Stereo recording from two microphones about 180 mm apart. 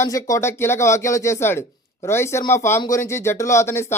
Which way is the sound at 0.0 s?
15° left (ahead or behind).